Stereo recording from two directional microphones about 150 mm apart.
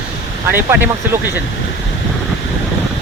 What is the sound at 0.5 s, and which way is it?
Speech, 15° right (ahead or behind).